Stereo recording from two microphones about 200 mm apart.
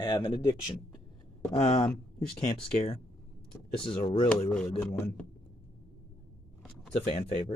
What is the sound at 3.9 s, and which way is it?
Speech, 30° left (ahead or behind).